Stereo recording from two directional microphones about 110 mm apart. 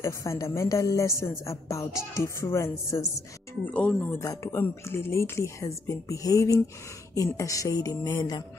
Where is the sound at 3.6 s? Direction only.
10° left (ahead or behind).